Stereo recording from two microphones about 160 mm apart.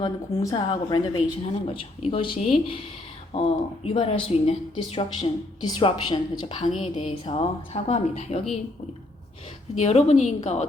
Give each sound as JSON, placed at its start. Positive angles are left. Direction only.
{"t": 0.4, "sound": "a woman's voice", "side_deg": 25}
{"t": 9.7, "sound": "a woman's voice", "side_deg": 45}